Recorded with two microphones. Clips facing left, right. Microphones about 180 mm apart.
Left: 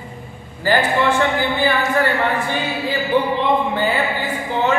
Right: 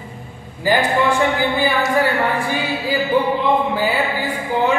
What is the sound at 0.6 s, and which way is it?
Speech, 15° right (ahead or behind).